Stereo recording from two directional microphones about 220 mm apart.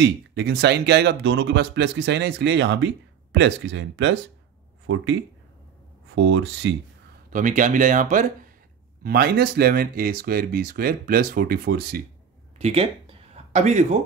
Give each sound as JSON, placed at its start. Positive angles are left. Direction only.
{"t": 0.0, "sound": "speech", "side_deg": -50}
{"t": 6.1, "sound": "speech", "side_deg": -55}
{"t": 7.2, "sound": "speech", "side_deg": -35}
{"t": 12.5, "sound": "a sound", "side_deg": -25}